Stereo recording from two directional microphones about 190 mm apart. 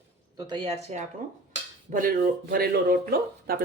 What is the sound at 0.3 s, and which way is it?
Speech, 25° right (ahead or behind).